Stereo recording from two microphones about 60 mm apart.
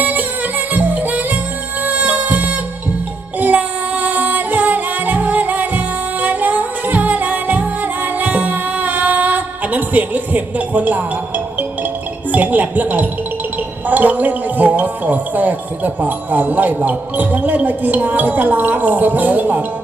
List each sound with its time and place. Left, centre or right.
0.0 s music: right
12.3 s speech: right